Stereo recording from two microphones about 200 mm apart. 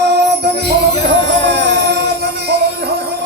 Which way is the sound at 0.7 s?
60° right (ahead or behind).